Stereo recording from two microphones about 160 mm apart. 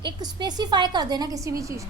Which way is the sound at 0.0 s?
25° right (ahead or behind).